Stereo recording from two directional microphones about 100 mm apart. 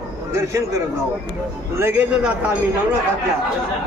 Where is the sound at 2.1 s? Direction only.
10° right (ahead or behind).